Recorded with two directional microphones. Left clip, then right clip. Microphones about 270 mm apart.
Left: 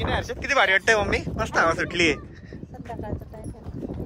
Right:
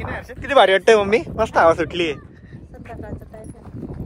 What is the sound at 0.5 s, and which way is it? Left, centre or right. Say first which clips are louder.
Speech: right 7 dB; centre.